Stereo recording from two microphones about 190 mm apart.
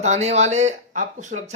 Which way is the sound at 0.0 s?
35° right (ahead or behind).